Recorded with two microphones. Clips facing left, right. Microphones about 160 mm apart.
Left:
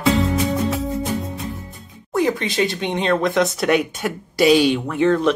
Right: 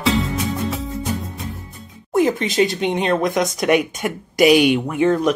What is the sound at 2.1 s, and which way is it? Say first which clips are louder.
Speech: right 2 dB; 20° right (ahead or behind).